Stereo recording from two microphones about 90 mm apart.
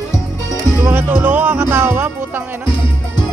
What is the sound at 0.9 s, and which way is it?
Music, 20° right (ahead or behind).